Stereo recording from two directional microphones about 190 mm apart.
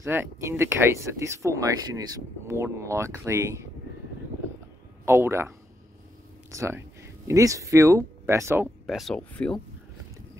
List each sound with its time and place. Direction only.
0.0 s speech: 15° right (ahead or behind)
5.0 s speech: 15° right (ahead or behind)
6.5 s speech: 15° right (ahead or behind)
8.8 s speech: centre (ahead or behind)